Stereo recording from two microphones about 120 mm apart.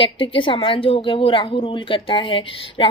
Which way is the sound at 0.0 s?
45° left (ahead or behind).